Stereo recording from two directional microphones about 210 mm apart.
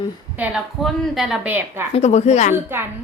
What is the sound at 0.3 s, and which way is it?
A woman's voice, 5° right (ahead or behind).